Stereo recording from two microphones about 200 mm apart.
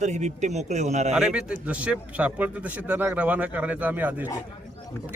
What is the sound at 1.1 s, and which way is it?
A man's voice, 5° right (ahead or behind).